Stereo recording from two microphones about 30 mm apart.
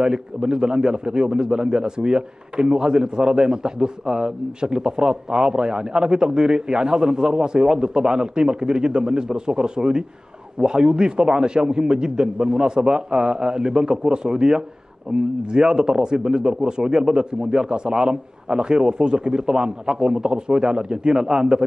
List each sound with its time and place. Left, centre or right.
0.0 s a man's voice: right